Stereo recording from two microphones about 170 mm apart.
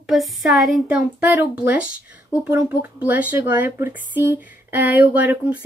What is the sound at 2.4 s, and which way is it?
Speech, 10° right (ahead or behind).